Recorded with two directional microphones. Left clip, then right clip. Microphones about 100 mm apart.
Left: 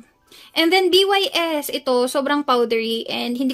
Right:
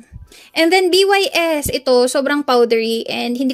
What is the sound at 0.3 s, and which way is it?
A woman's voice, 30° right (ahead or behind).